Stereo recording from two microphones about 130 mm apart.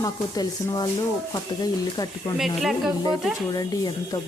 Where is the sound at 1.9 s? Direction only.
30° left (ahead or behind).